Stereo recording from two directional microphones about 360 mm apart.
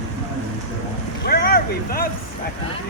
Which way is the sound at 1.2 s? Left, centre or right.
Left.